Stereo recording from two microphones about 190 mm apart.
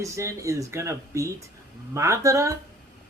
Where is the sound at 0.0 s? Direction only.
15° right (ahead or behind).